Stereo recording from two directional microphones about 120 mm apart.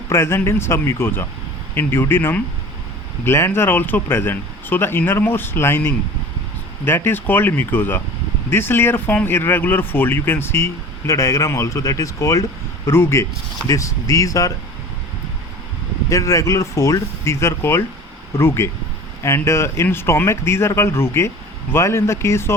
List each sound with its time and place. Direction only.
0.1 s speech: 20° left (ahead or behind)
16.0 s speech: 25° left (ahead or behind)